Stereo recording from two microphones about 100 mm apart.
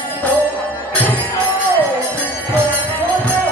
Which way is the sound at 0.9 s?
15° left (ahead or behind).